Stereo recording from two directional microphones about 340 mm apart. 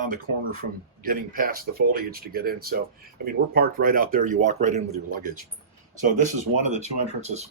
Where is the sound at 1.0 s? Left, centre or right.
Right.